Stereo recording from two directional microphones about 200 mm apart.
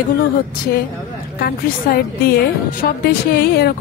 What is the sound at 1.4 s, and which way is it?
A woman's voice, 50° left (ahead or behind).